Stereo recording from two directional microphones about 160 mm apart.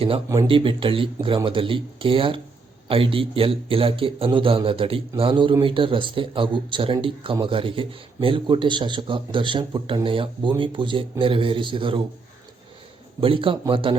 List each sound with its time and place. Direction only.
0.4 s a man's voice: 35° right (ahead or behind)
13.1 s a man's voice: 35° right (ahead or behind)